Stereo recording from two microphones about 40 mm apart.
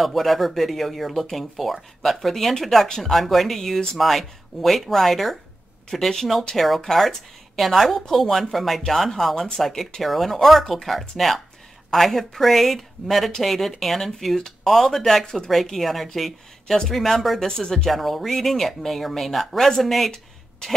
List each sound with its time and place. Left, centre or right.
0.0 s speech: centre
17.5 s speech: centre